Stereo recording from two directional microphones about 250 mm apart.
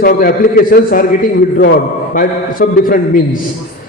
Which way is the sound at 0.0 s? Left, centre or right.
Left.